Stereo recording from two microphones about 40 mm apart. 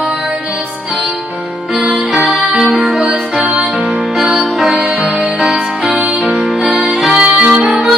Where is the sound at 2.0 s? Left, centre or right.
Right; by 4.7 s centre.